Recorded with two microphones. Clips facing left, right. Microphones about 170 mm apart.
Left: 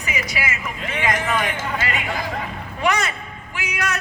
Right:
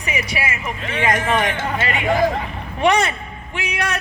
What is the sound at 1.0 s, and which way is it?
A man's voice, 30° right (ahead or behind).